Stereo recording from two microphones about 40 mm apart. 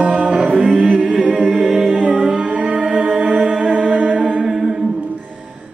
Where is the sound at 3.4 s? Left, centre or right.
Right.